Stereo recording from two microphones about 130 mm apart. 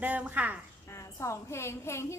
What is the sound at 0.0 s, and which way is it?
Speech, 10° right (ahead or behind).